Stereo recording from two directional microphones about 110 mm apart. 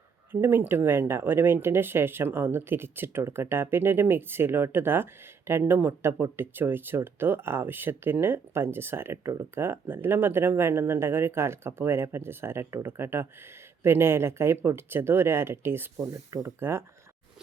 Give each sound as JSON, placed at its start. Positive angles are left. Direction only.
{"t": 0.3, "sound": "speech", "side_deg": -20}